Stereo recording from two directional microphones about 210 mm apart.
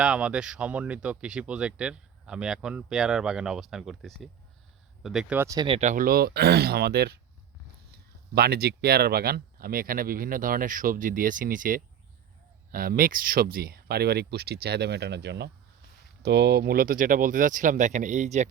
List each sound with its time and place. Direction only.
0.0 s speech: 5° right (ahead or behind); by 7.2 s 50° right (ahead or behind)
8.4 s speech: 50° right (ahead or behind)